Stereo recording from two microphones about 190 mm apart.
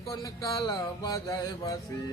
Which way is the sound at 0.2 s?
20° left (ahead or behind).